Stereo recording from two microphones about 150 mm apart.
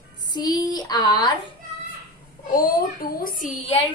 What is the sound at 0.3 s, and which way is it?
A woman's voice, 25° left (ahead or behind).